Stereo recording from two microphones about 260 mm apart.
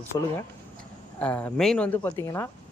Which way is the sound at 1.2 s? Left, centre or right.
Centre.